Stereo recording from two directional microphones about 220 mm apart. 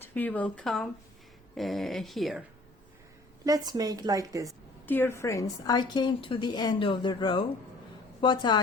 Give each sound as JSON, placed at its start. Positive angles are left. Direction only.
{"t": 0.0, "sound": "speech", "side_deg": 10}
{"t": 3.4, "sound": "a woman's voice", "side_deg": -15}
{"t": 4.9, "sound": "a woman's voice", "side_deg": 10}